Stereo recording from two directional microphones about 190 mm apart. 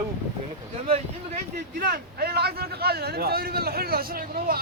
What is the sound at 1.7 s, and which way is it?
A man's voice, 55° right (ahead or behind).